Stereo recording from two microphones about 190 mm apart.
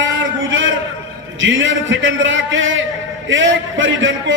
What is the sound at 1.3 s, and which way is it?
A man's voice, 85° right.